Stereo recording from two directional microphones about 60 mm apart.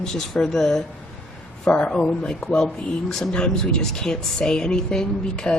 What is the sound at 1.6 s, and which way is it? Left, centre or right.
A man's voice, left.